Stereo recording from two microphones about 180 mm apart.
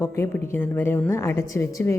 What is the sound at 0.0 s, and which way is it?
A woman's voice, 15° left (ahead or behind).